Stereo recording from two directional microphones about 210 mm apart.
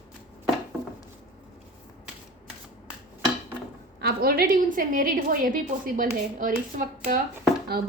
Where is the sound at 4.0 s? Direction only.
45° right (ahead or behind).